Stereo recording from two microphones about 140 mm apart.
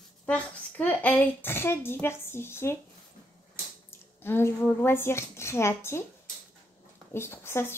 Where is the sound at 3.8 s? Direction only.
15° left (ahead or behind).